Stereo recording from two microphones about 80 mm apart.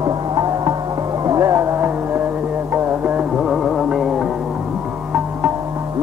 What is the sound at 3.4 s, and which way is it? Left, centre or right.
Music, centre.